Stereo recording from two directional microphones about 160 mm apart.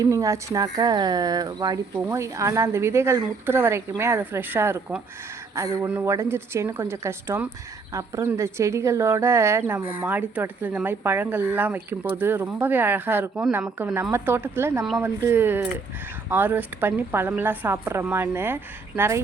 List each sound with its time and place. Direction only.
0.0 s speech: 20° right (ahead or behind)